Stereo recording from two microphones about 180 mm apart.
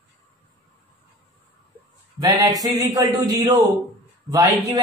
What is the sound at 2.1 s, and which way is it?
Speech, 20° right (ahead or behind).